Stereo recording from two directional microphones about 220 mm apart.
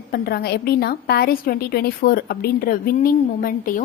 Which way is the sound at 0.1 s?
45° left (ahead or behind).